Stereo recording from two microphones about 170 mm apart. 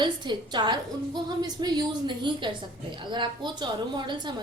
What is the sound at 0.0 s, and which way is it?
A woman's voice, 25° right (ahead or behind).